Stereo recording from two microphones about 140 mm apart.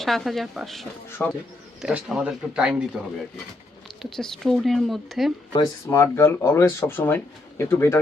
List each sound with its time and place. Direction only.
0.0 s a woman's voice: centre (ahead or behind)
1.2 s speech: 15° left (ahead or behind)
1.8 s speech: 5° right (ahead or behind)
4.0 s a woman's voice: 5° left (ahead or behind)
5.5 s speech: 20° left (ahead or behind)